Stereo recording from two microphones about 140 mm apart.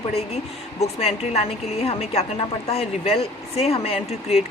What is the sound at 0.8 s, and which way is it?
Speech, 50° left (ahead or behind).